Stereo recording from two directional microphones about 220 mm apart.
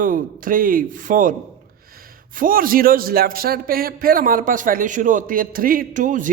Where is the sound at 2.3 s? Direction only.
40° right (ahead or behind).